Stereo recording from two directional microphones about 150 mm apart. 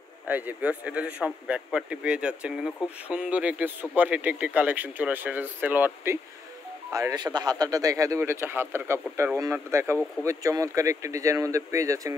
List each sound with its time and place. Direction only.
0.3 s speech: 10° right (ahead or behind)
6.9 s speech: 20° right (ahead or behind)